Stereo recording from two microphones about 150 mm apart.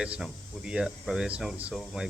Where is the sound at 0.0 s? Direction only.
5° right (ahead or behind).